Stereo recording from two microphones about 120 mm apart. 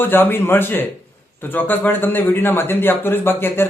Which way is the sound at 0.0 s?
15° left (ahead or behind).